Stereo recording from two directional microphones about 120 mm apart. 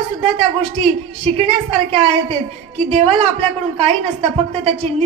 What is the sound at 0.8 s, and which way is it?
A woman's voice, 55° right (ahead or behind).